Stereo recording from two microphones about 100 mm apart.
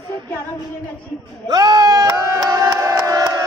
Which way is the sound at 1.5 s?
40° right (ahead or behind).